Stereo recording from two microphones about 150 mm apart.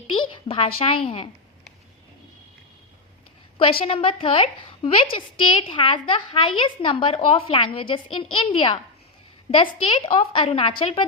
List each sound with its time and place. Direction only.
0.1 s a woman's voice: 35° left (ahead or behind)
3.6 s a woman's voice: 35° left (ahead or behind)